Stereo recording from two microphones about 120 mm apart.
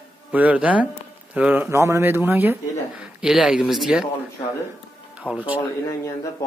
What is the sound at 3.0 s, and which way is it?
Speech, 5° right (ahead or behind).